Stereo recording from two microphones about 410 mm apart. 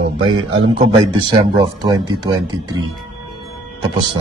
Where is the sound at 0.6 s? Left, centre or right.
Centre.